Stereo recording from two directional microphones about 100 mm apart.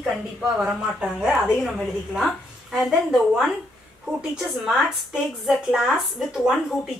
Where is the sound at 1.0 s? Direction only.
5° right (ahead or behind).